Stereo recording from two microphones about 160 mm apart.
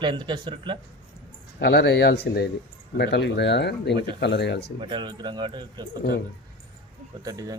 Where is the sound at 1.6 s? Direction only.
90° left.